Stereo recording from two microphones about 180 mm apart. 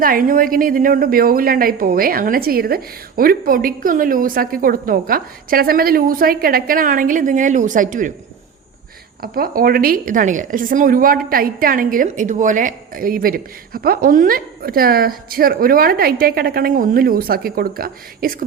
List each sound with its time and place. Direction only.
0.0 s a woman's voice: 50° right (ahead or behind)
9.2 s a woman's voice: 55° right (ahead or behind)